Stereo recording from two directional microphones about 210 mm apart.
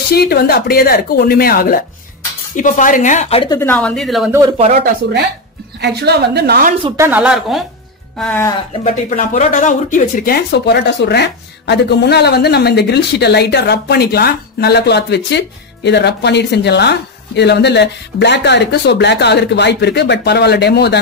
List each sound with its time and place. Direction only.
0.1 s speech: 50° left (ahead or behind); by 3.5 s 25° left (ahead or behind)
3.5 s speech: 10° left (ahead or behind)
4.6 s a woman's voice: 40° right (ahead or behind)
7.0 s speech: 5° right (ahead or behind)
8.2 s speech: 10° left (ahead or behind)
8.8 s speech: 35° left (ahead or behind)